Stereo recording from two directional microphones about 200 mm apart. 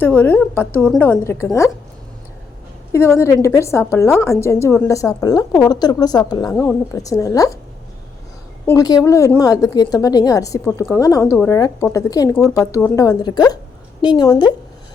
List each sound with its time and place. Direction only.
0.0 s a woman's voice: 10° left (ahead or behind)
2.9 s a woman's voice: 15° left (ahead or behind)
8.6 s a woman's voice: 20° left (ahead or behind)